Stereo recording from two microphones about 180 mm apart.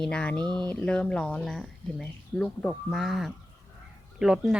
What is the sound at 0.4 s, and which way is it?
Speech, 25° right (ahead or behind).